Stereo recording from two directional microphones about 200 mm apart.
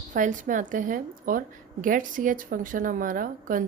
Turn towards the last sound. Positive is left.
turn(degrees=-40)  # may be behind; listen again after turning